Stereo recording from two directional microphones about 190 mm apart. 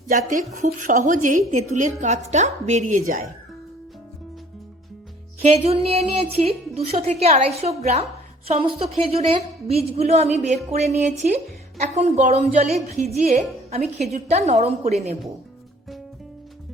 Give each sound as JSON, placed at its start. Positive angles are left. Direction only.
{"t": 0.1, "sound": "a woman's voice", "side_deg": -40}
{"t": 5.4, "sound": "a woman's voice", "side_deg": -35}